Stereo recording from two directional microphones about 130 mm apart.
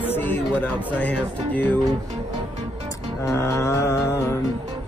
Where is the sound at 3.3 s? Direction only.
20° left (ahead or behind).